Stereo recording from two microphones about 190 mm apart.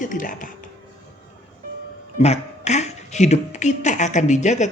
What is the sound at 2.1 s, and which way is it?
Speech, 35° left (ahead or behind).